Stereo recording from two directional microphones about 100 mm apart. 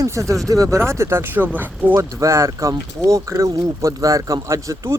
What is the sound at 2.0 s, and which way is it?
Speech, 30° right (ahead or behind).